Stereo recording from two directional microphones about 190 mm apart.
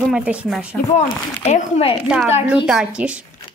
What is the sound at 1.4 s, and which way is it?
Speech, 30° left (ahead or behind).